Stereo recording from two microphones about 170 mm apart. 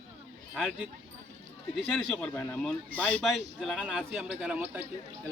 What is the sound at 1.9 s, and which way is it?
Speech, centre (ahead or behind).